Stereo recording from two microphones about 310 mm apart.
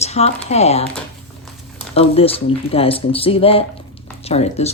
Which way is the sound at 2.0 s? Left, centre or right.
Centre.